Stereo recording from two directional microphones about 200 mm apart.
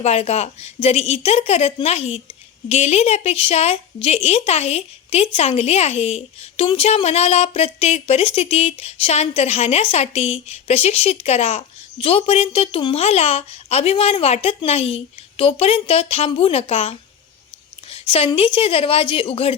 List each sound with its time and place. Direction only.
0.0 s a woman's voice: 30° left (ahead or behind)